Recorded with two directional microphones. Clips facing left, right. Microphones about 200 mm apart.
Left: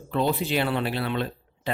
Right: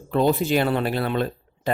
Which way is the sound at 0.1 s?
45° right (ahead or behind).